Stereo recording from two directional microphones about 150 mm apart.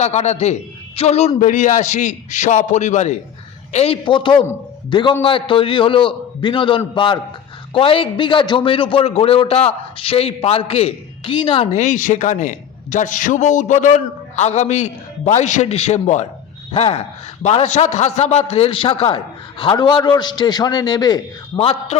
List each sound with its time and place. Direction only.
0.0 s a man's voice: 50° left (ahead or behind)
1.4 s a man's voice: 60° left (ahead or behind)
4.0 s a man's voice: 35° left (ahead or behind)
21.6 s a man's voice: 40° left (ahead or behind)